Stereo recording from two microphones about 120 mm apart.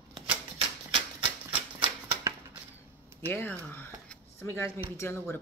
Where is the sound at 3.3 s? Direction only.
15° left (ahead or behind).